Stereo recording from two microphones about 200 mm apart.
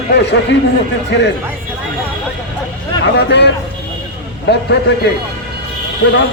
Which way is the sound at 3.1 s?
60° left (ahead or behind).